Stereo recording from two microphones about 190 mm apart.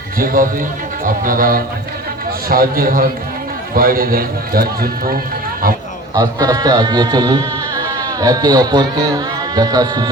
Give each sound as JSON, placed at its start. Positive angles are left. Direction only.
{"t": 0.2, "sound": "a man's voice", "side_deg": -50}
{"t": 6.1, "sound": "speech", "side_deg": -20}